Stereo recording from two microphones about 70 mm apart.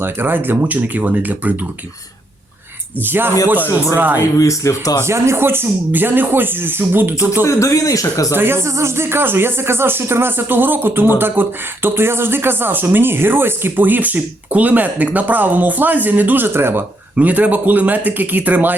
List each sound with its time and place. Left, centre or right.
0.0 s speech: right
3.0 s speech: right
4.2 s speech: left
5.0 s speech: right
7.4 s speech: left
8.4 s speech: right
17.2 s speech: right